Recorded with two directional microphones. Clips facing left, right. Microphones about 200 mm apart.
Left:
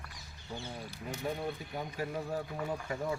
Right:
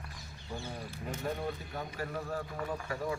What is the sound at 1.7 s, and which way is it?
A man's voice, 15° left (ahead or behind).